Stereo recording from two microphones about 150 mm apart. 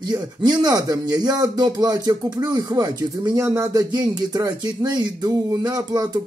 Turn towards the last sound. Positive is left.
turn(degrees=-25)  # may be behind; listen again after turning